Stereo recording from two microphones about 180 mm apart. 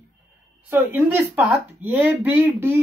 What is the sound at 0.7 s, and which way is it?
Speech, 10° right (ahead or behind).